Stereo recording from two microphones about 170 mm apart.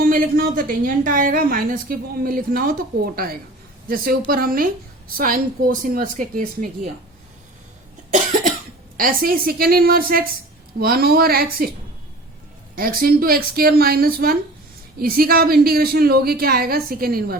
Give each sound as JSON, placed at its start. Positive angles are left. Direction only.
{"t": 0.0, "sound": "a woman's voice", "side_deg": -55}
{"t": 8.1, "sound": "cough", "side_deg": -55}
{"t": 9.0, "sound": "a woman's voice", "side_deg": -60}
{"t": 12.7, "sound": "a woman's voice", "side_deg": -55}